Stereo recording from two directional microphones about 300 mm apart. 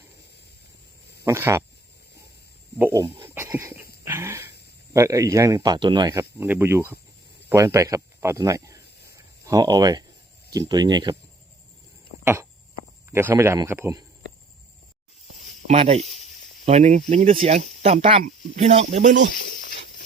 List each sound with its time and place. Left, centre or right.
1.2 s speech: centre
2.7 s speech: centre
4.0 s a sound: centre
4.9 s speech: centre
9.1 s a sound: centre
10.5 s speech: centre
12.2 s a sound: centre
13.1 s speech: centre
15.6 s speech: right
16.0 s speech: left
16.6 s speech: right
19.4 s a sound: left